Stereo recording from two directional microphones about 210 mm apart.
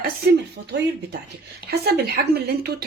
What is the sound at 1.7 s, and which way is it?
Speech, 50° right (ahead or behind).